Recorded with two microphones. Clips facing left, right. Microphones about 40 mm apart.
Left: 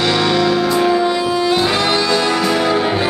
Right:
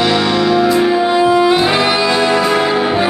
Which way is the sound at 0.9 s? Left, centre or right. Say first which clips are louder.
Right 4 dB; right.